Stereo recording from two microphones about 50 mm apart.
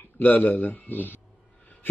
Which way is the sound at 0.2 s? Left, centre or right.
Left.